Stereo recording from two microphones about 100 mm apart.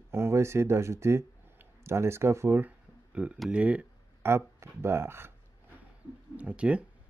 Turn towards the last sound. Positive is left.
turn(degrees=-10)  # may be behind; listen again after turning